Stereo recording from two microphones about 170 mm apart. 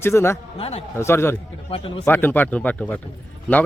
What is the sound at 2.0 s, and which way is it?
Speech, 10° left (ahead or behind).